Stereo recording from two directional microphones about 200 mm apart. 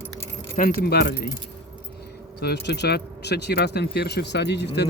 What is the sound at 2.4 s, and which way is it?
Speech, 55° left (ahead or behind).